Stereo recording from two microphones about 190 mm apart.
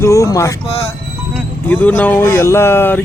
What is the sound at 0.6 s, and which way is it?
Speech, 30° left (ahead or behind).